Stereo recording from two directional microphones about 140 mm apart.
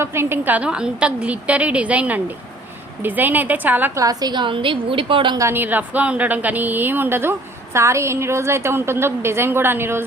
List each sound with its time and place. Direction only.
0.0 s a woman's voice: 15° right (ahead or behind)
4.0 s a woman's voice: 25° right (ahead or behind)
5.4 s a woman's voice: 15° right (ahead or behind)